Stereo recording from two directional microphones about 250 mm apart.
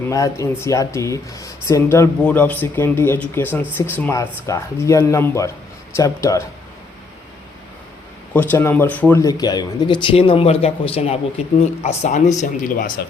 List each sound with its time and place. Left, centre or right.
0.1 s speech: centre
8.3 s speech: centre; by 13.1 s left